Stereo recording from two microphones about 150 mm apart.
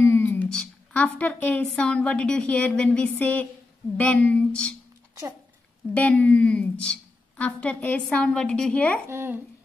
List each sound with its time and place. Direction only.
0.0 s a woman's voice: 15° left (ahead or behind)
5.9 s a woman's voice: 10° left (ahead or behind)
9.0 s speech: 15° right (ahead or behind)